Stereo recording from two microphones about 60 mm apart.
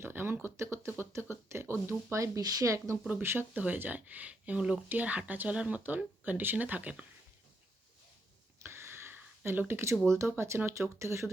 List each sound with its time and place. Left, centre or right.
0.0 s a sound: right
0.4 s speech: right
2.7 s speech: right
3.5 s speech: right
8.6 s a sound: right
10.1 s speech: right